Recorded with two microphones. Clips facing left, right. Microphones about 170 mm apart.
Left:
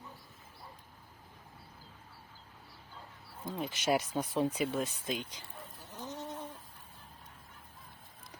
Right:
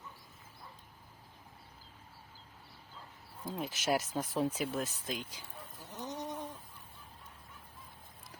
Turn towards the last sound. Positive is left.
turn(degrees=-15)  # may be behind; listen again after turning